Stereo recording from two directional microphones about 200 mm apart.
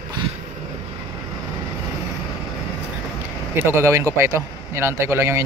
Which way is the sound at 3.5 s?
10° right (ahead or behind).